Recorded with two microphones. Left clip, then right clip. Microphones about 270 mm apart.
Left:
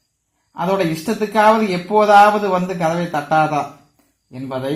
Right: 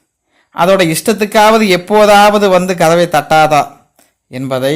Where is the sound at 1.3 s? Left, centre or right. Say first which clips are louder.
Right 6 dB; right.